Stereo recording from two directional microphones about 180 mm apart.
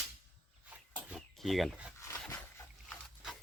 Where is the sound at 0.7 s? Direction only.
5° right (ahead or behind).